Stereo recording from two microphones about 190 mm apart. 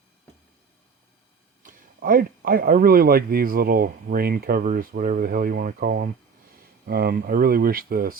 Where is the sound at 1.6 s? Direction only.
45° right (ahead or behind).